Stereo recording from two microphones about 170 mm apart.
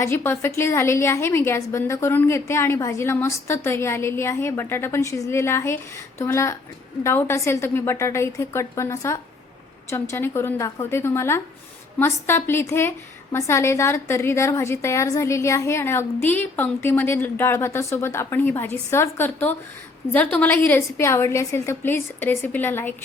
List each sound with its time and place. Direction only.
0.0 s a woman's voice: 15° left (ahead or behind)